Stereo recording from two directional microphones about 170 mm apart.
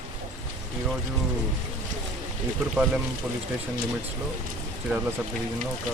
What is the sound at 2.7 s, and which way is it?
Speech, 5° right (ahead or behind).